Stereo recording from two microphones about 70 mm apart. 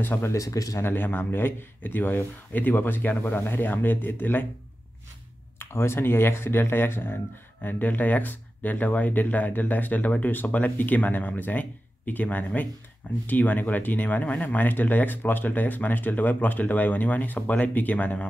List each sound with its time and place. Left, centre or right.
0.0 s speech: left
0.3 s speech: left
0.8 s speech: left
5.6 s speech: left